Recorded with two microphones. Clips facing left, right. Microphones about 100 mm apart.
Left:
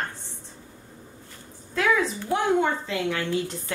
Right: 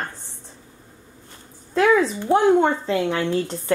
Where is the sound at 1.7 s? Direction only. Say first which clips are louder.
Right 6 dB; 35° right (ahead or behind).